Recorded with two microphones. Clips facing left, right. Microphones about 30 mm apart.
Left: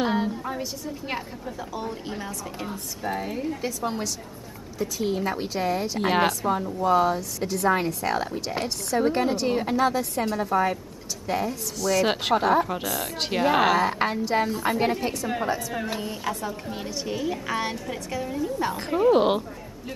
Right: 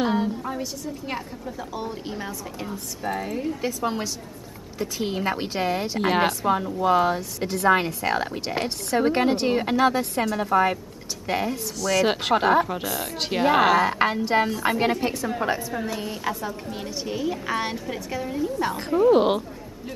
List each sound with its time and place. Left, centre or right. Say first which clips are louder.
0.0 s a woman's voice: right 1 dB; centre
1.7 s a woman's voice: right 1 dB; centre
3.6 s a woman's voice: right 2 dB; centre
4.7 s a woman's voice: left 1 dB; right
5.9 s a woman's voice: right 1 dB; centre
6.4 s a woman's voice: right 2 dB; right
9.5 s a woman's voice: right 2 dB; right
11.8 s a woman's voice: right 1 dB; centre
12.4 s a woman's voice: right 2 dB; centre
12.6 s a woman's voice: even; centre
14.2 s a woman's voice: right 2 dB; right; by 18.9 s centre
18.9 s speech: right 2 dB; centre
19.1 s a woman's voice: right 1 dB; centre